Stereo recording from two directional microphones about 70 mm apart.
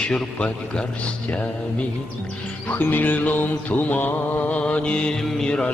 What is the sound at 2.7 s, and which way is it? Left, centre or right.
Mantra, left.